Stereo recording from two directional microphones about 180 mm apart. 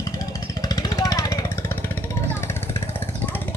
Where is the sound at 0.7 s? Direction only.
20° left (ahead or behind).